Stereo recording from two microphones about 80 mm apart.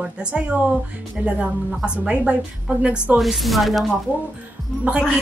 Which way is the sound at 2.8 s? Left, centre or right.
Centre.